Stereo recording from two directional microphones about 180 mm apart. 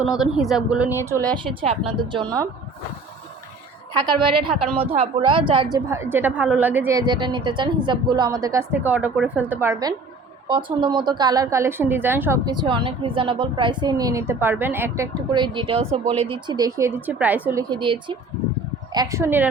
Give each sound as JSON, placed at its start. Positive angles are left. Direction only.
{"t": 0.0, "sound": "speech", "side_deg": 0}
{"t": 1.5, "sound": "speech", "side_deg": -35}
{"t": 4.0, "sound": "a woman's voice", "side_deg": -25}
{"t": 5.7, "sound": "a woman's voice", "side_deg": -15}
{"t": 7.0, "sound": "a woman's voice", "side_deg": -25}
{"t": 10.5, "sound": "a woman's voice", "side_deg": -25}